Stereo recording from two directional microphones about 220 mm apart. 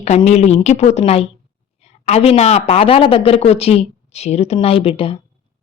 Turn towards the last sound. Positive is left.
turn(degrees=25)  # may be behind; listen again after turning